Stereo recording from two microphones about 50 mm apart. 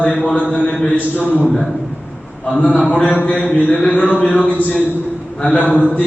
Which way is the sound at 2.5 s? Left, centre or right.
Left.